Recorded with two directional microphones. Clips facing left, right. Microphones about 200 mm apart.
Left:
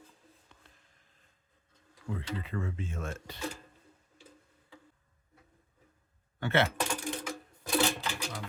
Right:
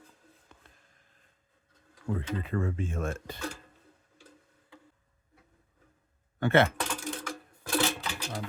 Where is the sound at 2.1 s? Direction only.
50° right (ahead or behind).